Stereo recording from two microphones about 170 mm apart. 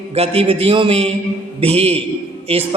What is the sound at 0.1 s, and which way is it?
A man's voice, 35° right (ahead or behind).